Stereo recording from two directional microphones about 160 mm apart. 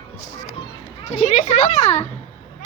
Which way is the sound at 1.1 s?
50° left (ahead or behind).